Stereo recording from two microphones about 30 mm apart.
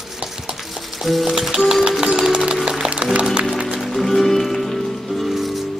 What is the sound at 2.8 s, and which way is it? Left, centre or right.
Music, right.